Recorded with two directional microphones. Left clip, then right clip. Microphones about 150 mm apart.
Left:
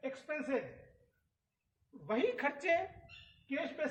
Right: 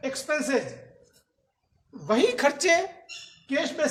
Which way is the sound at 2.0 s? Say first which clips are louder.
Right 12 dB; 35° right (ahead or behind).